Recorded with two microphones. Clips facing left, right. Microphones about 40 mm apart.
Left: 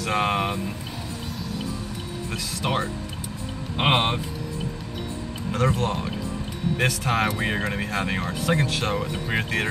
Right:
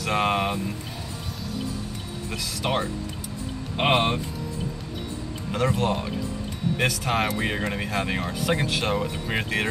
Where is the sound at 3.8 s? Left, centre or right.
Centre.